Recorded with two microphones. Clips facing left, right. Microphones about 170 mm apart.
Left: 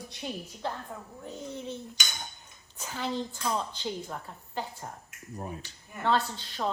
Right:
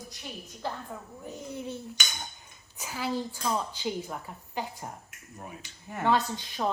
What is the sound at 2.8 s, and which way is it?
A woman's voice, 10° right (ahead or behind).